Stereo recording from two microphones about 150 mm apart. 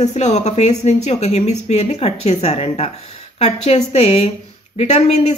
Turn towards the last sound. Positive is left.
turn(degrees=50)  # may be behind; listen again after turning